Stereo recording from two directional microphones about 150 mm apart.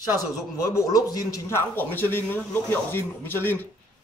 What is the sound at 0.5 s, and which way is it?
Speech, 20° left (ahead or behind).